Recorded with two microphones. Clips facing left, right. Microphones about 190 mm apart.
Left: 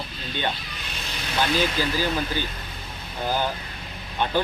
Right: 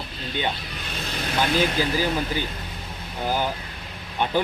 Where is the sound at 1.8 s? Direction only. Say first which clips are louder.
Right 2 dB; 15° right (ahead or behind).